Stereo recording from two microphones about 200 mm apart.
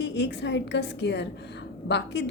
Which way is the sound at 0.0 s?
60° left (ahead or behind).